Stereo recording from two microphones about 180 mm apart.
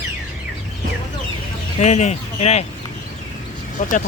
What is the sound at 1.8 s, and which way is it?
Speech, 40° left (ahead or behind).